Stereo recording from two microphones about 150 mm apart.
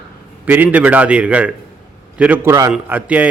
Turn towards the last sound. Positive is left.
turn(degrees=-10)  # may be behind; listen again after turning